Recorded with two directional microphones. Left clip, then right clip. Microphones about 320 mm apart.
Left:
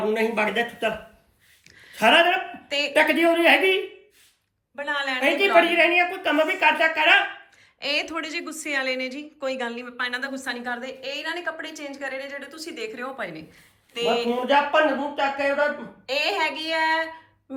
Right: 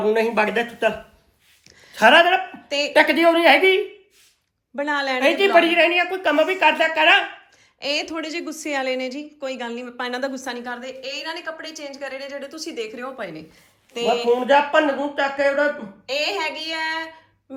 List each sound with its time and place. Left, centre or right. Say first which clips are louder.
0.1 s a woman's voice: right 6 dB; right
2.0 s a woman's voice: right 4 dB; right
2.6 s a woman's voice: even; centre
2.9 s a woman's voice: right 4 dB; right
4.8 s a woman's voice: right 4 dB; centre
7.8 s a woman's voice: right 1 dB; centre
14.4 s a woman's voice: right 1 dB; right
16.0 s a woman's voice: even; centre